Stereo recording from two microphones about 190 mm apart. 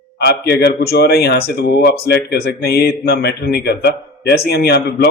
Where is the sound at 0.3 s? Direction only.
60° left (ahead or behind).